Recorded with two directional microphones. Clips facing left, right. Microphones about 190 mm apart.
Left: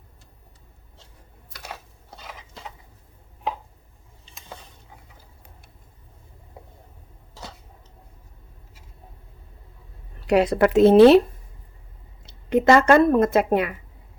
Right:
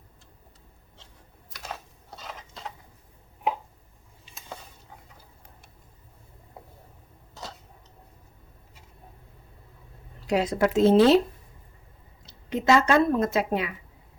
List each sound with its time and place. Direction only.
10.2 s speech: 65° left (ahead or behind)
12.2 s speech: 55° left (ahead or behind)